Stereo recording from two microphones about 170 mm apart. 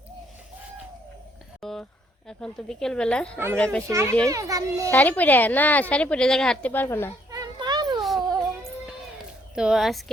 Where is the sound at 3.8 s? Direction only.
15° right (ahead or behind).